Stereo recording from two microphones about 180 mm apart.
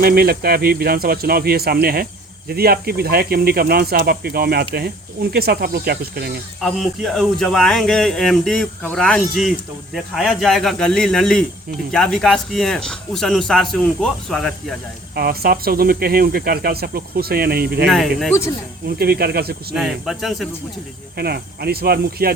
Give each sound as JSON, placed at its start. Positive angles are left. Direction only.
{"t": 0.0, "sound": "speech", "side_deg": -60}
{"t": 6.6, "sound": "speech", "side_deg": 0}
{"t": 15.1, "sound": "speech", "side_deg": -60}
{"t": 17.8, "sound": "speech", "side_deg": 0}
{"t": 18.9, "sound": "speech", "side_deg": -60}
{"t": 19.7, "sound": "speech", "side_deg": 0}
{"t": 21.2, "sound": "speech", "side_deg": -60}